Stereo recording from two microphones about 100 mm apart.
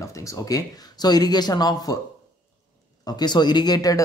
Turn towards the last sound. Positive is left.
turn(degrees=40)  # may be behind; listen again after turning